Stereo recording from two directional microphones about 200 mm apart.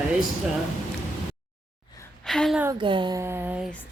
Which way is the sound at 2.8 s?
25° right (ahead or behind).